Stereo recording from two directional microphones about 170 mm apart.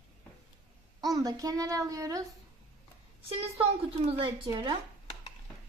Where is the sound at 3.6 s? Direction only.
30° right (ahead or behind).